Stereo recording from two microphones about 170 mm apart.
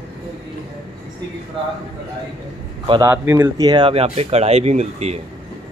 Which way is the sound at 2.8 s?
25° right (ahead or behind).